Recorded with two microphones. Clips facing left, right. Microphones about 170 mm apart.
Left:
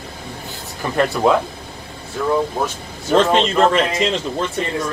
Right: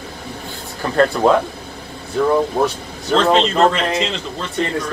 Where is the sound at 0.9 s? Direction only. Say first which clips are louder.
Right 2 dB; centre (ahead or behind).